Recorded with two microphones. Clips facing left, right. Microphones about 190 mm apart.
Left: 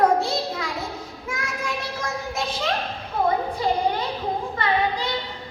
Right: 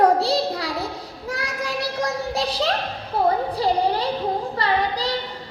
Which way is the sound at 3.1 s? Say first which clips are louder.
Right 2 dB; 35° right (ahead or behind).